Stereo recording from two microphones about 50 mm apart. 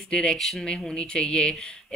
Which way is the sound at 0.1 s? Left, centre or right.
Centre.